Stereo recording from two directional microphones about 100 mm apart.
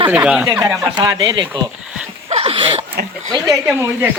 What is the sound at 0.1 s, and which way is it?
Speech, 10° right (ahead or behind).